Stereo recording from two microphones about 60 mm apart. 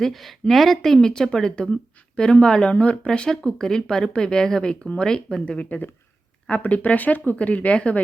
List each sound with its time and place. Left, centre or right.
0.0 s speech: centre
5.6 s speech: left